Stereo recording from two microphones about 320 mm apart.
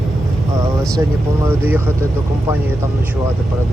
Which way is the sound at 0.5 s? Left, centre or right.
Centre.